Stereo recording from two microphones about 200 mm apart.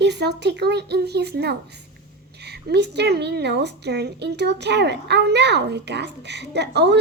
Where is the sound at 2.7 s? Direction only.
55° right (ahead or behind).